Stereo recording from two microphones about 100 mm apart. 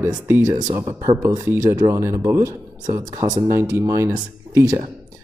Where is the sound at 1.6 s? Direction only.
35° right (ahead or behind).